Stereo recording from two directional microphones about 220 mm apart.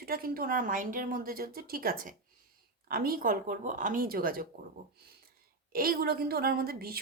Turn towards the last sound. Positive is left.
turn(degrees=-45)  # may be behind; listen again after turning